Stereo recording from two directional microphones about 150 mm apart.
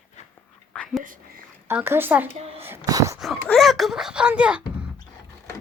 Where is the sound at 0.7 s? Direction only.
Centre (ahead or behind).